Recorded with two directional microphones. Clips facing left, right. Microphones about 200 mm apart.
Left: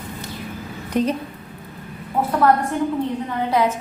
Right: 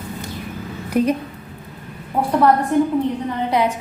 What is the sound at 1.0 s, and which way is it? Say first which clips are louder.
Speech: right 2 dB; 10° right (ahead or behind).